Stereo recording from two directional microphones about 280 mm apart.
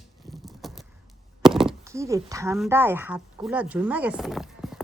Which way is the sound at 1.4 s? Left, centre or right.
Centre.